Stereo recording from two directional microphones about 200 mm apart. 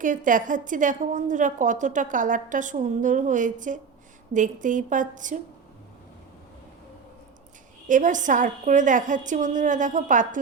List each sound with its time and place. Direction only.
0.0 s a woman's voice: 40° right (ahead or behind)
7.9 s a woman's voice: 40° right (ahead or behind)